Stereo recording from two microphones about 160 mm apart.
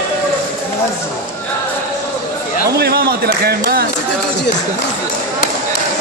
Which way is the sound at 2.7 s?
85° right.